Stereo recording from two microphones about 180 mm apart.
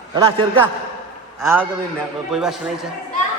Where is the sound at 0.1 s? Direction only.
30° right (ahead or behind).